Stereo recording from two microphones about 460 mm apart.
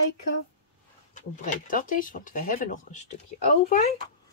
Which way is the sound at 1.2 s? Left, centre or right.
Centre.